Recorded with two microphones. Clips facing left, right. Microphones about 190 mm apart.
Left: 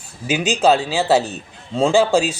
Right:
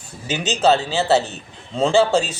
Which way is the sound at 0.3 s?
10° left (ahead or behind).